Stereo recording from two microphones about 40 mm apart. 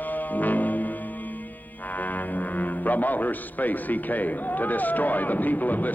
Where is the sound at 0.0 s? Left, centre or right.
Left.